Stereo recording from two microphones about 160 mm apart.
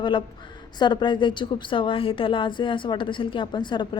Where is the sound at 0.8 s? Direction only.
30° left (ahead or behind).